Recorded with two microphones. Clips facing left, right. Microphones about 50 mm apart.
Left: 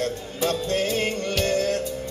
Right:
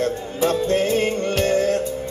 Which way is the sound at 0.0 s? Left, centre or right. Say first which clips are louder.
Right 5 dB; right.